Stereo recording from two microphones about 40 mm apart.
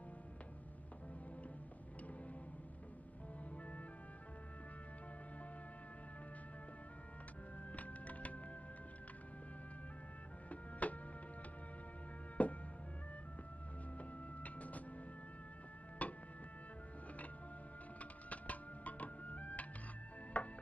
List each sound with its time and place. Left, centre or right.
7.7 s music: left
10.5 s music: left
12.4 s music: left
14.0 s music: left
16.0 s music: left
18.0 s music: left